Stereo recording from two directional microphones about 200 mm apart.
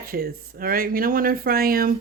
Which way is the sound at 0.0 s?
45° right (ahead or behind).